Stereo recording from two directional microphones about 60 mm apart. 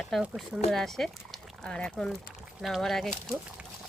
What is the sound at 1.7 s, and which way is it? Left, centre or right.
Speech, centre.